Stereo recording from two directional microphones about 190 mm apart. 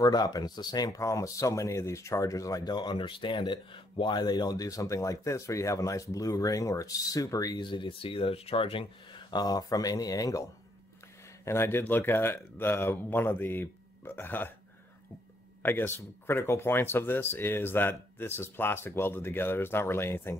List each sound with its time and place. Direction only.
0.0 s speech: 20° left (ahead or behind)
11.4 s speech: 15° left (ahead or behind)
15.6 s speech: 10° left (ahead or behind)